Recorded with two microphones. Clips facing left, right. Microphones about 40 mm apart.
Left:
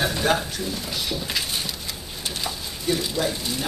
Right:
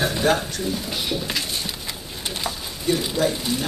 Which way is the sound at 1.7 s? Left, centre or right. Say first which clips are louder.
Right 1 dB; centre.